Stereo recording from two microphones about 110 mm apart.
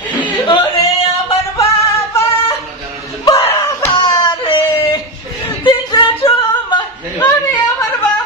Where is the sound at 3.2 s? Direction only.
30° left (ahead or behind).